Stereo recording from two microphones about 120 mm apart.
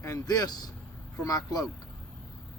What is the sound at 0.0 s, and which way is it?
Speech, 30° left (ahead or behind).